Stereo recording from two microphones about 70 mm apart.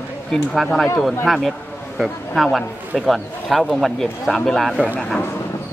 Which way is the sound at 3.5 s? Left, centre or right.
Centre.